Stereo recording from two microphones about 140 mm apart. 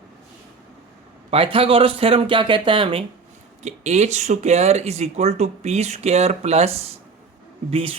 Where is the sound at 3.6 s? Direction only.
55° right (ahead or behind).